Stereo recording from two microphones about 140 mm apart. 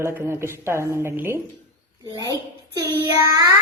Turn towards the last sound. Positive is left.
turn(degrees=-25)  # may be behind; listen again after turning